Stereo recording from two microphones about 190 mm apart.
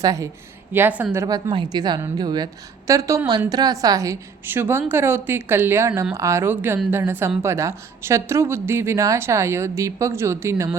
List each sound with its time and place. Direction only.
0.0 s speech: 15° right (ahead or behind)